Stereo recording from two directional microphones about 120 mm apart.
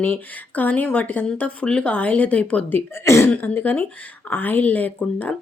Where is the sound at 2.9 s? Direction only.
20° left (ahead or behind).